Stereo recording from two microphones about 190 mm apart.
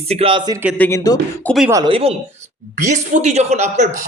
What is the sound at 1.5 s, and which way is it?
Speech, centre (ahead or behind).